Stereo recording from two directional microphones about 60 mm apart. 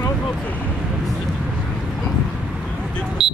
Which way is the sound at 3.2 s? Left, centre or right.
Centre.